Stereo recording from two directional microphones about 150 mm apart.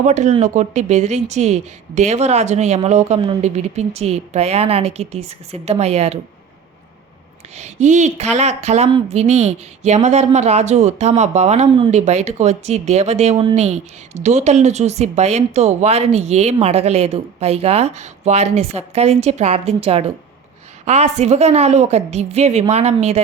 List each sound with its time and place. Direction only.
0.0 s speech: 50° right (ahead or behind)
7.5 s speech: 50° right (ahead or behind)